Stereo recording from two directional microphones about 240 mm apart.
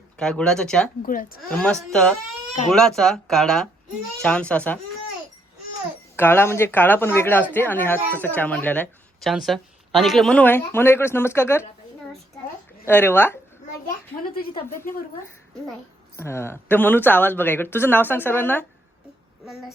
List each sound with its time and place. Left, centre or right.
0.2 s speech: centre
1.0 s speech: left
1.4 s speech: centre
6.1 s a woman's voice: centre
12.8 s a woman's voice: centre
16.1 s a woman's voice: centre